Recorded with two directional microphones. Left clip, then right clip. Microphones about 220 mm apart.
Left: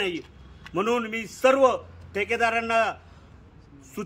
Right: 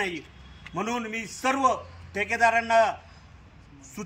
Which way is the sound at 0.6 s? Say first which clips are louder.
Left 5 dB; 25° left (ahead or behind).